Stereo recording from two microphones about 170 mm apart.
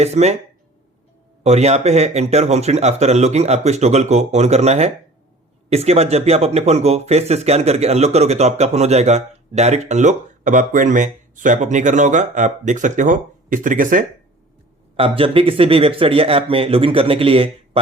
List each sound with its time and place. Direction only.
0.0 s speech: 40° right (ahead or behind)
1.5 s speech: 40° right (ahead or behind)
14.9 s speech: 35° right (ahead or behind)